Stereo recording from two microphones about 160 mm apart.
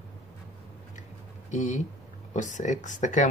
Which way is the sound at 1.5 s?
50° left (ahead or behind).